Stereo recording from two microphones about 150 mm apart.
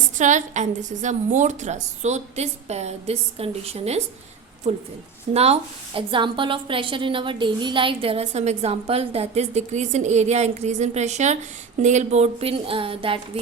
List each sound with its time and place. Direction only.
0.2 s a woman's voice: 55° right (ahead or behind); by 13.4 s 35° right (ahead or behind)